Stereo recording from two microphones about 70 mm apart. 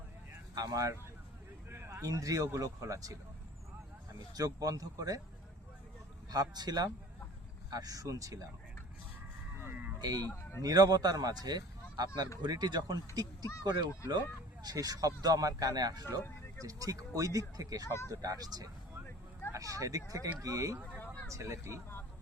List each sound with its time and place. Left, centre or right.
0.5 s speech: right
1.7 s a sound: right
2.0 s speech: right
4.4 s speech: right
6.3 s speech: right
7.7 s speech: right
9.6 s vehicle: right
10.2 s speech: left
10.6 s speech: right
14.6 s speech: right
19.5 s speech: right
20.9 s a sound: left
21.2 s speech: right